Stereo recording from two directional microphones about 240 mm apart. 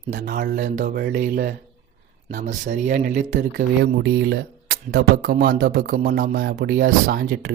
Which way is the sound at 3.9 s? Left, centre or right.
Right.